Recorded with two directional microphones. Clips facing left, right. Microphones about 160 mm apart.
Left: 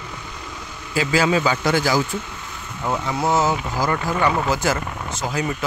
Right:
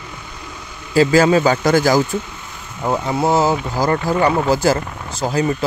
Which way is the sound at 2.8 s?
35° right (ahead or behind).